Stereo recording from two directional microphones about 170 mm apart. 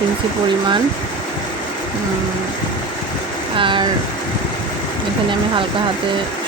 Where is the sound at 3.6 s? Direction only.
30° right (ahead or behind).